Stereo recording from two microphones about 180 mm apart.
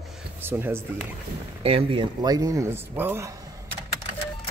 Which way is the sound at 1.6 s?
30° right (ahead or behind).